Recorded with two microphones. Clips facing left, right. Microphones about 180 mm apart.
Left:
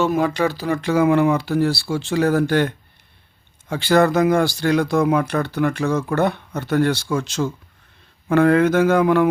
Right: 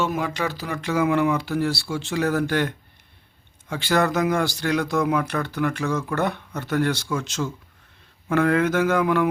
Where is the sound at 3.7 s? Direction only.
30° left (ahead or behind).